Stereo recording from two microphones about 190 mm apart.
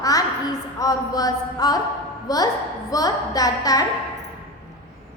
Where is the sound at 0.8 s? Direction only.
20° left (ahead or behind).